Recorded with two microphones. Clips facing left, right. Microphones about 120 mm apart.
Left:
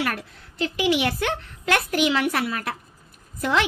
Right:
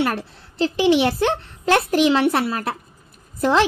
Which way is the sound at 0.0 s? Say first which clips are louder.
Right 5 dB; 30° right (ahead or behind).